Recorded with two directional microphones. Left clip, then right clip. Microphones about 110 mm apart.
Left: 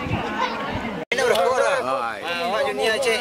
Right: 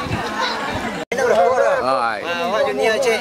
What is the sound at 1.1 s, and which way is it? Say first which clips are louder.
Chatter: right 2 dB; 20° left (ahead or behind).